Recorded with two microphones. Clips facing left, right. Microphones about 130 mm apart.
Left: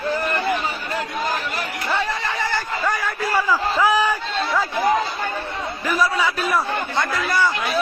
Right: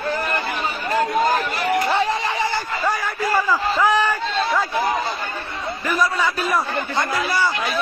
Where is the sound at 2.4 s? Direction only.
15° right (ahead or behind).